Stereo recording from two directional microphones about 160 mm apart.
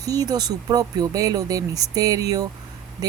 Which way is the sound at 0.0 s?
20° right (ahead or behind).